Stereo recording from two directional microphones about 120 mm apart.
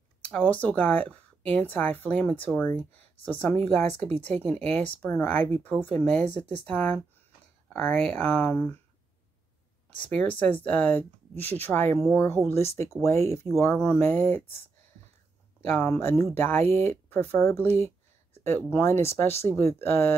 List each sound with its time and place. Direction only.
0.2 s speech: 10° left (ahead or behind)
9.8 s speech: 10° left (ahead or behind)
15.7 s speech: 20° left (ahead or behind)
17.8 s a sound: 20° left (ahead or behind)
18.7 s speech: 20° left (ahead or behind)